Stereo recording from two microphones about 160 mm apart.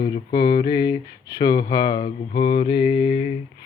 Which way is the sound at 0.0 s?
75° left (ahead or behind).